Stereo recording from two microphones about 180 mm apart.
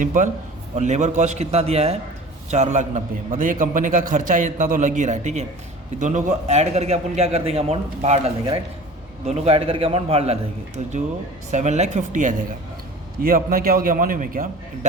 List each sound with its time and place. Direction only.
0.0 s a man's voice: 45° right (ahead or behind)